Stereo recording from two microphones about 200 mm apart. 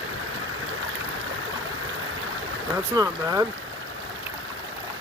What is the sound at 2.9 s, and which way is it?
Speech, 20° right (ahead or behind).